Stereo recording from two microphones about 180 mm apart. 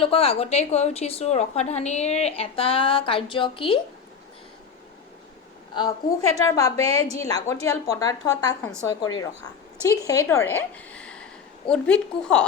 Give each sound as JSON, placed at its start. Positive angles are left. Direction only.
{"t": 0.0, "sound": "a woman's voice", "side_deg": 30}
{"t": 5.7, "sound": "a woman's voice", "side_deg": 20}